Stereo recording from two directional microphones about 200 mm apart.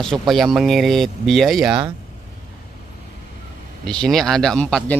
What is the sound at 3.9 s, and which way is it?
A man's voice, 5° left (ahead or behind).